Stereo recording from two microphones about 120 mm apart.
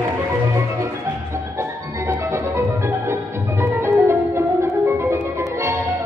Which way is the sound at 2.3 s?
25° right (ahead or behind).